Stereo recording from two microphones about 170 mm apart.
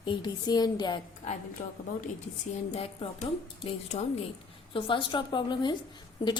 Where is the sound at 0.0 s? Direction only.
25° left (ahead or behind).